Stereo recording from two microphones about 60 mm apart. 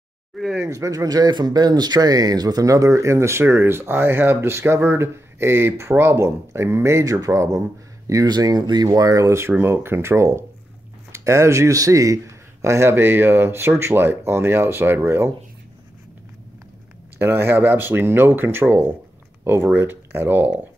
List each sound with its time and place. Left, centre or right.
0.4 s speech: centre
0.7 s speech: right
8.1 s speech: right
9.6 s speech: right
12.9 s speech: right
17.2 s speech: right